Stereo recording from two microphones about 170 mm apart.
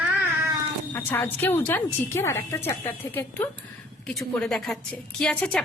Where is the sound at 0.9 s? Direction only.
10° left (ahead or behind).